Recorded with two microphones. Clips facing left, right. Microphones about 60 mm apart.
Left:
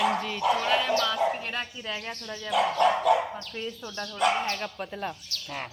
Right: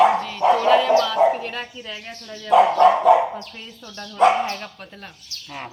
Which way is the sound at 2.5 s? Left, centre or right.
Right.